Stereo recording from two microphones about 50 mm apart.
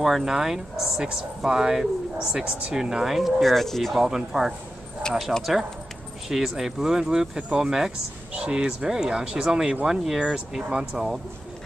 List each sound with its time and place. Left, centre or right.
0.0 s speech: centre
4.0 s speech: centre
5.1 s speech: centre
5.4 s speech: centre